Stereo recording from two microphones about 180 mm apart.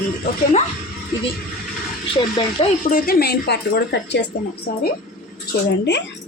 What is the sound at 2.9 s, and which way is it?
Speech, 55° left (ahead or behind).